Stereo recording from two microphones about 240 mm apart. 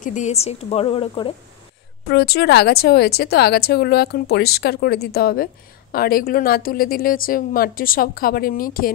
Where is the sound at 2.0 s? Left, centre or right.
Left.